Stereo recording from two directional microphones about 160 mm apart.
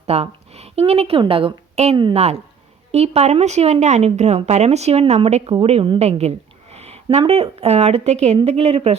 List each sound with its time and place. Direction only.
0.0 s a woman's voice: 40° right (ahead or behind)